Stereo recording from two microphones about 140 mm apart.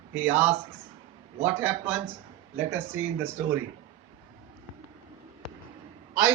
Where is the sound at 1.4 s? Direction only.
15° right (ahead or behind).